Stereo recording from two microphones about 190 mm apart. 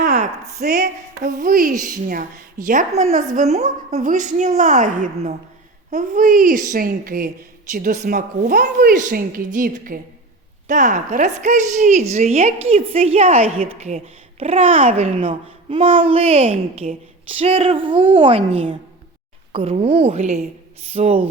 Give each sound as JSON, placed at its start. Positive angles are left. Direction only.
{"t": 0.6, "sound": "a woman's voice", "side_deg": -55}